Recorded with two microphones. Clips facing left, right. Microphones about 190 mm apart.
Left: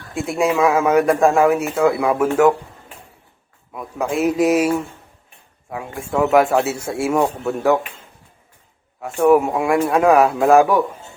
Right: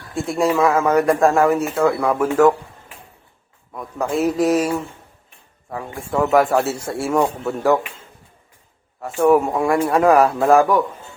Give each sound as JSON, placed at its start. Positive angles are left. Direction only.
{"t": 0.2, "sound": "speech", "side_deg": 0}
{"t": 3.7, "sound": "speech", "side_deg": 5}
{"t": 5.7, "sound": "speech", "side_deg": 0}
{"t": 9.0, "sound": "speech", "side_deg": 0}